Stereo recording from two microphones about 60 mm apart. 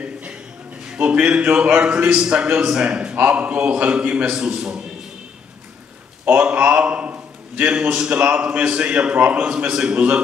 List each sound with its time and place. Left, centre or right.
0.0 s a sound: centre
0.9 s a man's voice: right
6.4 s a man's voice: right